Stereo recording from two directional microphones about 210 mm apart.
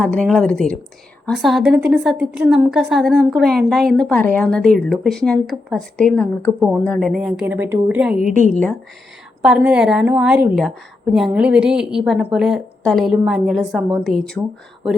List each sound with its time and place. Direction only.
0.0 s a woman's voice: 5° left (ahead or behind)
8.2 s a woman's voice: 40° right (ahead or behind)
9.4 s a woman's voice: 5° right (ahead or behind)